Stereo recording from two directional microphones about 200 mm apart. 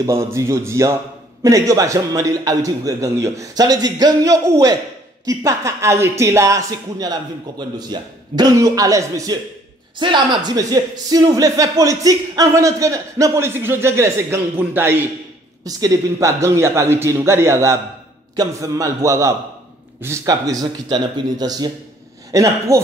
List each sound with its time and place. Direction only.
0.0 s a man's voice: 15° right (ahead or behind)